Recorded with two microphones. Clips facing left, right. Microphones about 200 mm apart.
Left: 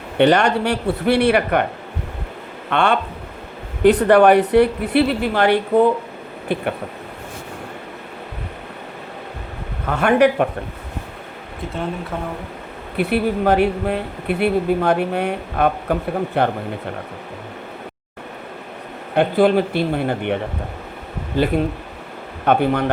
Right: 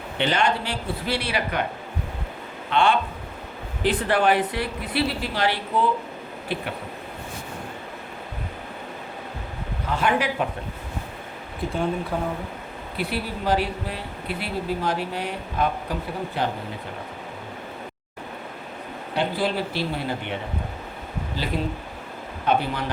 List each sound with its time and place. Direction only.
0.2 s speech: 65° left (ahead or behind)
2.6 s speech: 65° left (ahead or behind)
9.8 s speech: 60° left (ahead or behind)
13.0 s speech: 60° left (ahead or behind)
19.1 s speech: 55° left (ahead or behind)